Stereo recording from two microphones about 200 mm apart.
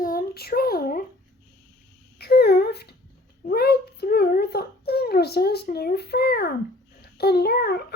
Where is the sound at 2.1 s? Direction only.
55° left (ahead or behind).